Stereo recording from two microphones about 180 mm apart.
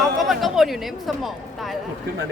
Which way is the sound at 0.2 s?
Centre (ahead or behind).